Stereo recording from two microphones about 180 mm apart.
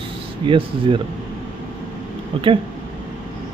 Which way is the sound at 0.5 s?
25° right (ahead or behind).